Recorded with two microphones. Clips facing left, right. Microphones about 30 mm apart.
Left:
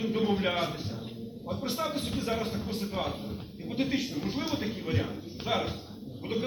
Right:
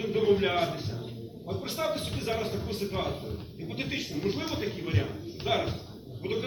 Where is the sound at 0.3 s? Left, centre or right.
Centre.